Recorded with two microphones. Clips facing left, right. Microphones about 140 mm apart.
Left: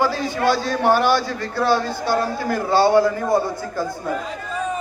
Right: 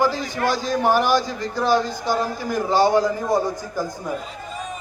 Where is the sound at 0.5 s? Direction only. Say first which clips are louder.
Left 1 dB; 15° right (ahead or behind).